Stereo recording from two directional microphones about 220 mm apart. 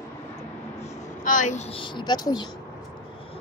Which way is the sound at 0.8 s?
35° left (ahead or behind).